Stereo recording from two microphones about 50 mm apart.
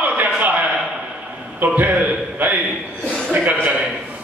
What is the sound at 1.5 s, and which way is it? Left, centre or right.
Speech, right.